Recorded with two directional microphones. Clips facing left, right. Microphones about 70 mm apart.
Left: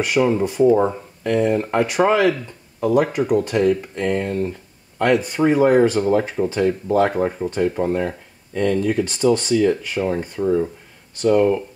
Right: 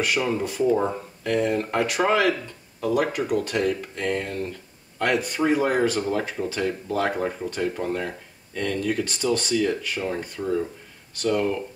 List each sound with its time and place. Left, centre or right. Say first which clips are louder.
0.0 s speech: left 6 dB; centre
0.9 s speech: left 4 dB; centre
5.9 s speech: left 7 dB; centre